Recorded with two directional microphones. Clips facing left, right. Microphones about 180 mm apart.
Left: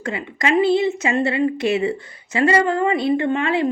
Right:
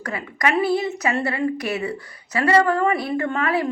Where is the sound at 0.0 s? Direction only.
25° left (ahead or behind).